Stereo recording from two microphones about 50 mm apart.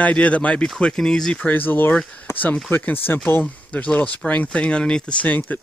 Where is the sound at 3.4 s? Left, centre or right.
Left.